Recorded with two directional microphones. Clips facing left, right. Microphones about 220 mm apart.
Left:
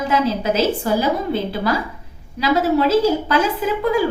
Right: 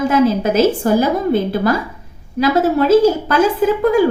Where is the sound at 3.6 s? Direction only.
50° right (ahead or behind).